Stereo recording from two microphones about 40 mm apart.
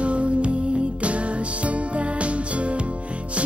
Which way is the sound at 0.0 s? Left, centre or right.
Right.